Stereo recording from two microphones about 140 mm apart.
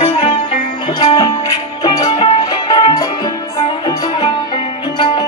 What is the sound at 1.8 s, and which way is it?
Music, 25° left (ahead or behind).